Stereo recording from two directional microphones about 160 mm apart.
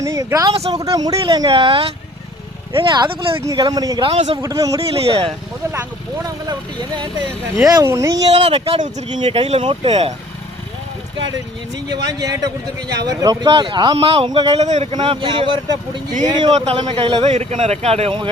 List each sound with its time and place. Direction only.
0.0 s a sound: 20° right (ahead or behind)
0.7 s a man's voice: 25° right (ahead or behind)
4.1 s a man's voice: 40° right (ahead or behind)
4.4 s speech: 20° right (ahead or behind)
4.8 s a man's voice: 35° right (ahead or behind)
6.2 s a man's voice: 25° right (ahead or behind)
13.1 s a man's voice: 25° right (ahead or behind)
14.6 s a man's voice: 45° right (ahead or behind)
14.9 s a man's voice: 30° right (ahead or behind)
16.5 s a man's voice: 40° right (ahead or behind)